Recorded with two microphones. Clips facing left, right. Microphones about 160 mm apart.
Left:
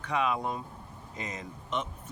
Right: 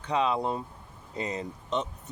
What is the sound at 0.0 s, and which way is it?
Speech, 30° right (ahead or behind).